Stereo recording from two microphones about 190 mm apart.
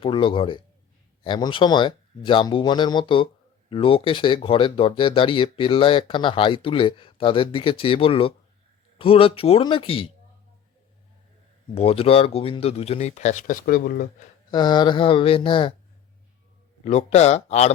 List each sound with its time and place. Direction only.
0.0 s speech: 25° left (ahead or behind)
11.7 s speech: 30° left (ahead or behind); by 14.1 s 50° left (ahead or behind)
14.5 s speech: 25° left (ahead or behind)
16.8 s speech: 35° left (ahead or behind)